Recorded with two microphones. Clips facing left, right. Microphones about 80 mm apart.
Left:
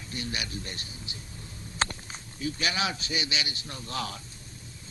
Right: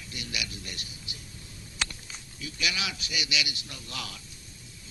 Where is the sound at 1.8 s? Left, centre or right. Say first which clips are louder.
Left 5 dB; left.